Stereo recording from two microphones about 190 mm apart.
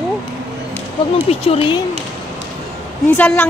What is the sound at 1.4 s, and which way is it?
Speech, 30° left (ahead or behind).